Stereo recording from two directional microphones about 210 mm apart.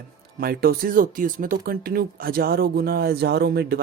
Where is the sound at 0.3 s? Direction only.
45° right (ahead or behind).